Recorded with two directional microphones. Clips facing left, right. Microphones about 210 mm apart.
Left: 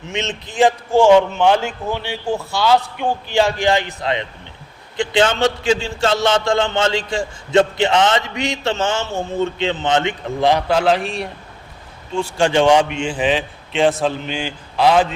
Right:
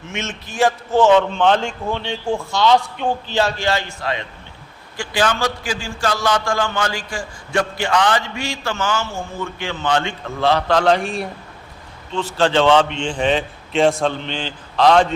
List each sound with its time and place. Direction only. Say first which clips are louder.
0.1 s a man's voice: left 4 dB; 20° left (ahead or behind); by 11.3 s centre (ahead or behind)
12.1 s a man's voice: left 1 dB; 10° left (ahead or behind)